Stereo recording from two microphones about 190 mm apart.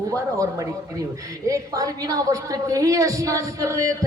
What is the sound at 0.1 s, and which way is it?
A woman's voice, 20° right (ahead or behind).